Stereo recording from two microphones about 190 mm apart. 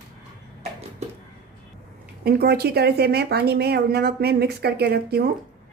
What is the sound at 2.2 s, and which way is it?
A woman's voice, 55° right (ahead or behind).